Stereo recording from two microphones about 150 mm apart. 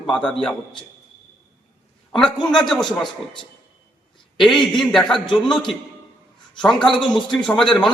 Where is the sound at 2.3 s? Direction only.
30° left (ahead or behind).